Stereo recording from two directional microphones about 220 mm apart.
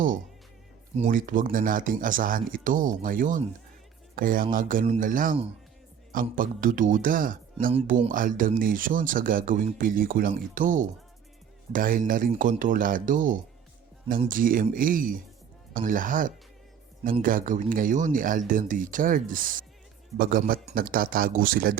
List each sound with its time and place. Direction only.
0.9 s speech: 35° right (ahead or behind)